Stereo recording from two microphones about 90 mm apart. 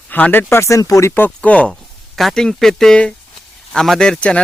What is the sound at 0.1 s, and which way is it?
Speech, 20° left (ahead or behind).